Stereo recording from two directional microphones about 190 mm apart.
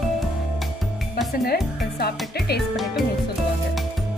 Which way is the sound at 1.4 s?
55° left (ahead or behind).